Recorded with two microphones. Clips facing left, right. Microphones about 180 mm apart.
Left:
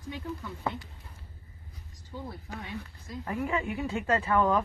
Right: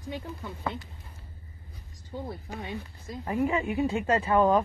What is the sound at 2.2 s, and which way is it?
Speech, 20° right (ahead or behind).